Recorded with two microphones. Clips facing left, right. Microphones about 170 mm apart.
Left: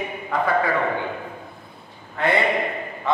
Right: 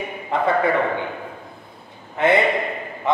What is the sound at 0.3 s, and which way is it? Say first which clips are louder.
Speech: right 2 dB; 25° right (ahead or behind).